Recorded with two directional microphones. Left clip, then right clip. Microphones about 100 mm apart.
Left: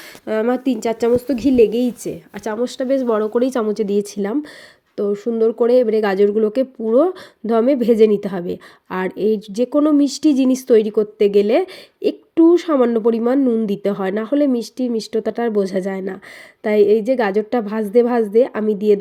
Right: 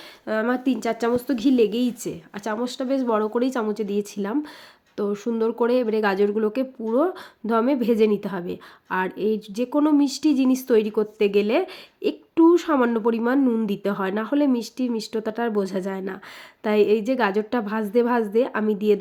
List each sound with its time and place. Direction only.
0.3 s speech: 45° left (ahead or behind)
3.6 s speech: 60° left (ahead or behind); by 4.4 s 45° left (ahead or behind)
4.9 s a woman's voice: 20° left (ahead or behind); by 10.6 s 50° left (ahead or behind)
10.7 s a woman's voice: 30° left (ahead or behind)
13.4 s speech: 15° left (ahead or behind)
13.7 s speech: 30° left (ahead or behind)
16.6 s a woman's voice: 20° left (ahead or behind)